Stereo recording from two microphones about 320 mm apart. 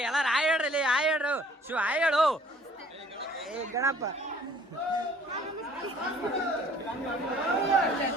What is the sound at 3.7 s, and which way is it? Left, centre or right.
Speech, centre.